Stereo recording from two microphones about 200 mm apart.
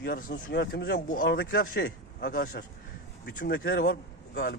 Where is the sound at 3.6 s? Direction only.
50° left (ahead or behind).